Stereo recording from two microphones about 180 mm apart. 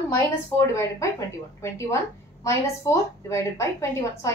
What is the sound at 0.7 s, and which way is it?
A woman's voice, 15° left (ahead or behind).